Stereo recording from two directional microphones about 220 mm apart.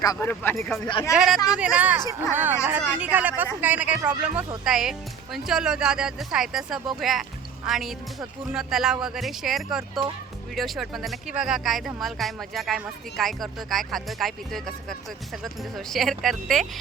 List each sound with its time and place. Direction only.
0.0 s speech: 15° left (ahead or behind)
0.9 s speech: 20° left (ahead or behind)
1.1 s a woman's voice: centre (ahead or behind)